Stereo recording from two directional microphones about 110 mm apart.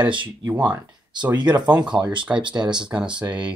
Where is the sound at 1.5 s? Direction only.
40° right (ahead or behind).